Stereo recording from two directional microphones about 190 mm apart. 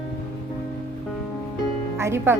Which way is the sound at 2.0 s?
15° right (ahead or behind).